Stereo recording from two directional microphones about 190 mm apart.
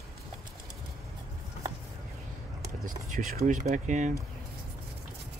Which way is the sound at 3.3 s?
40° right (ahead or behind).